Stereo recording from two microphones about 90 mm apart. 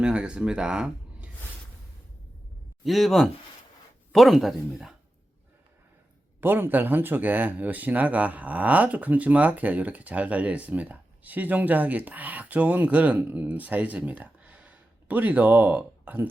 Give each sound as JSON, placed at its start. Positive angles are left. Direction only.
{"t": 0.0, "sound": "speech", "side_deg": -10}
{"t": 2.8, "sound": "speech", "side_deg": 0}
{"t": 6.4, "sound": "speech", "side_deg": -25}